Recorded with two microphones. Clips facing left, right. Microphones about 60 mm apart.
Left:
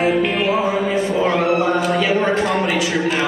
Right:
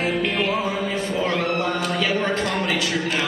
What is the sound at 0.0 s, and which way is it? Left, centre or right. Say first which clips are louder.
Music: left 5 dB; centre.